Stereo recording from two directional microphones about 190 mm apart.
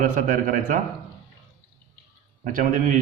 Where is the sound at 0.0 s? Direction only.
45° right (ahead or behind).